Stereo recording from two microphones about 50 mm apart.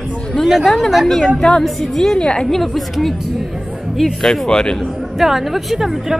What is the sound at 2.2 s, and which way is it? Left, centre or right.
Speech, centre.